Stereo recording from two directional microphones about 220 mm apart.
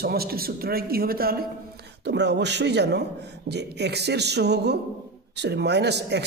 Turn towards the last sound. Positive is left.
turn(degrees=-50)  # may be behind; listen again after turning